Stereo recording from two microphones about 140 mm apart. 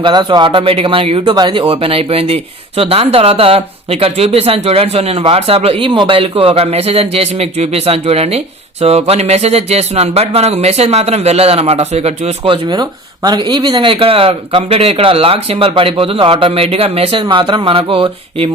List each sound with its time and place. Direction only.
0.0 s speech: 35° right (ahead or behind)
12.7 s speech: 30° right (ahead or behind)